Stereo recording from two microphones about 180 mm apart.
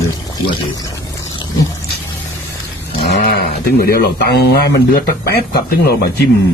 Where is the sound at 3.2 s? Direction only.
60° left (ahead or behind).